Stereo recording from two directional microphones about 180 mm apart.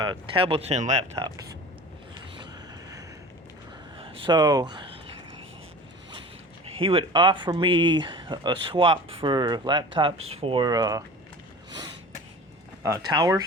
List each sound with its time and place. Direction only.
0.0 s speech: 25° right (ahead or behind)
3.9 s a sound: 30° right (ahead or behind)
6.7 s speech: 30° right (ahead or behind)
12.8 s speech: 20° right (ahead or behind)